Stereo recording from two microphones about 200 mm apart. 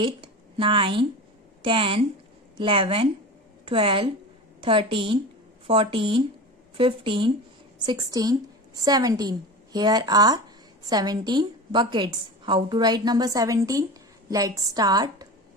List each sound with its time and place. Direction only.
0.0 s a woman's voice: 25° right (ahead or behind)